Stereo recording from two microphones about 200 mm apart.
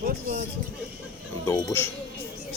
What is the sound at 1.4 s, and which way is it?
Speech, 15° left (ahead or behind).